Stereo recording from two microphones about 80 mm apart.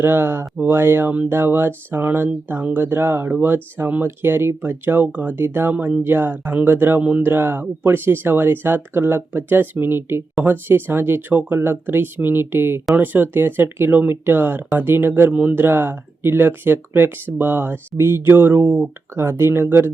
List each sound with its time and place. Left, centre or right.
0.0 s speech: right